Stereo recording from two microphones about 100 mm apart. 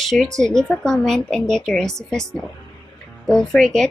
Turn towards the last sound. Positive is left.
turn(degrees=5)  # may be behind; listen again after turning